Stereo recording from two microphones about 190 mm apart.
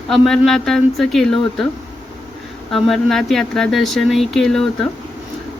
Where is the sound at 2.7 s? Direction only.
Centre (ahead or behind).